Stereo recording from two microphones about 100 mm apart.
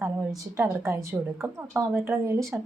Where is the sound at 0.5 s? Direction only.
25° right (ahead or behind).